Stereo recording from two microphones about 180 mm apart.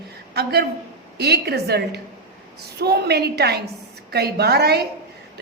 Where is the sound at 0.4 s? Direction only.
65° right (ahead or behind).